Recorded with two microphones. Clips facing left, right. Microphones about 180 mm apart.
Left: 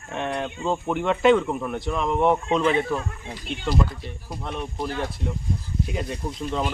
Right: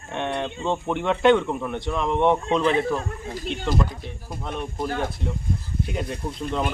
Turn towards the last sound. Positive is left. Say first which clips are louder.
# right 1 dB
turn(degrees=0)  # may be behind; listen again after turning